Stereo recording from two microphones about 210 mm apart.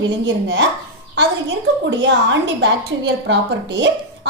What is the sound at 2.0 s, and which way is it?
A woman's voice, 60° right (ahead or behind).